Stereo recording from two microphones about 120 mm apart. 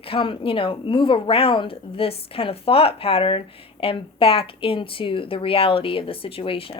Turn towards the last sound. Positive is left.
turn(degrees=50)  # may be behind; listen again after turning